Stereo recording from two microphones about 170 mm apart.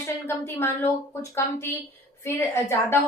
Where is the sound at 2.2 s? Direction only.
15° left (ahead or behind).